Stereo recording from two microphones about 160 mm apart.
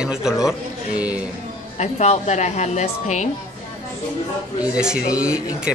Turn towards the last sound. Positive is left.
turn(degrees=-5)  # may be behind; listen again after turning